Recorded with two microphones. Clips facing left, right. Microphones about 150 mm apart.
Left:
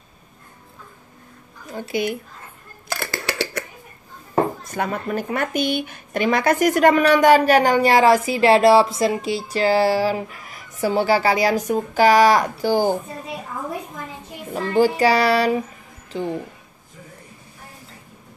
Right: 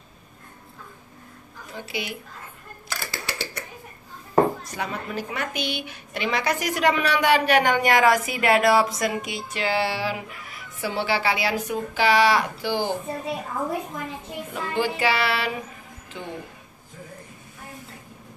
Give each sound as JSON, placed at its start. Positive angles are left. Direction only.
{"t": 1.7, "sound": "a woman's voice", "side_deg": 45}
{"t": 3.0, "sound": "a sound", "side_deg": 65}
{"t": 4.6, "sound": "a woman's voice", "side_deg": 50}
{"t": 14.5, "sound": "speech", "side_deg": 40}